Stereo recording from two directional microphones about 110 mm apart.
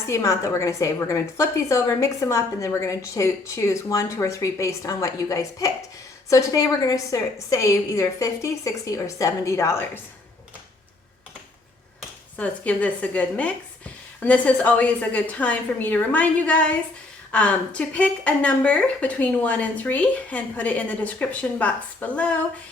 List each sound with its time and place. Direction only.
0.1 s a woman's voice: 30° left (ahead or behind)
12.4 s a woman's voice: 15° left (ahead or behind)